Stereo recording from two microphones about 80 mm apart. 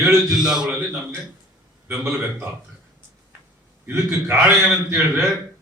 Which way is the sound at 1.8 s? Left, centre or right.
Right.